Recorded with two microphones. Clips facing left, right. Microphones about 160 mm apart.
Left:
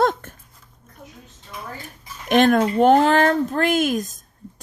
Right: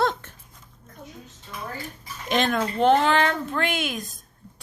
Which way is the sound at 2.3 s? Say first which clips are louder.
Left 8 dB; 50° left (ahead or behind).